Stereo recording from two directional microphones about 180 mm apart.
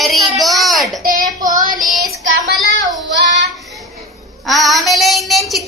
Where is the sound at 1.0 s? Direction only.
50° right (ahead or behind).